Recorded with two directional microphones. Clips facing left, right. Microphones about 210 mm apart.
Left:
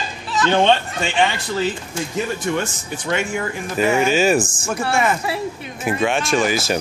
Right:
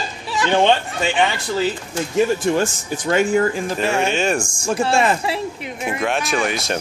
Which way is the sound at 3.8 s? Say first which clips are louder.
Left 6 dB; 5° left (ahead or behind).